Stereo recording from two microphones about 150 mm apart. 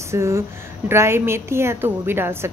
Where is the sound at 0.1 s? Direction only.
20° right (ahead or behind).